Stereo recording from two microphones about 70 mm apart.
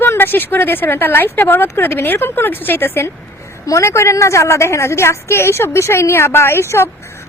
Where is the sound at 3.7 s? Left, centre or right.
Left.